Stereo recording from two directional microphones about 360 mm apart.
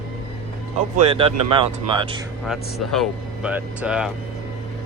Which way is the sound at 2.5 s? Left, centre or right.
Centre.